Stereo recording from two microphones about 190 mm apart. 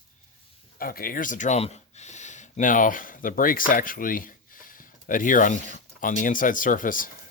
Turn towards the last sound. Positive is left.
turn(degrees=45)  # may be behind; listen again after turning